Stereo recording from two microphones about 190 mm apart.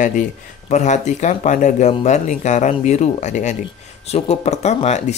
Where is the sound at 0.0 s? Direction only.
40° left (ahead or behind).